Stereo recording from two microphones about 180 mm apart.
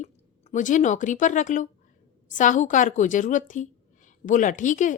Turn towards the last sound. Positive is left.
turn(degrees=45)  # may be behind; listen again after turning